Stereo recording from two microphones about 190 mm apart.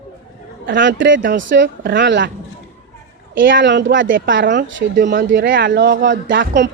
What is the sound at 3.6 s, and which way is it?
A woman's voice, 70° right (ahead or behind).